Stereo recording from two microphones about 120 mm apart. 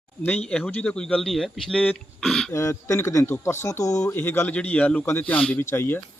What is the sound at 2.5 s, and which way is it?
A man's voice, 25° left (ahead or behind).